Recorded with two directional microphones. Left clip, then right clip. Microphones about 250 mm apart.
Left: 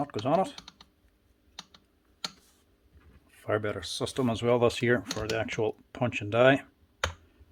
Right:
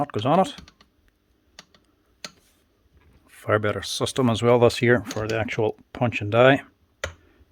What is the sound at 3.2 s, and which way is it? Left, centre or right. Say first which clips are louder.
Speech: right 7 dB; right.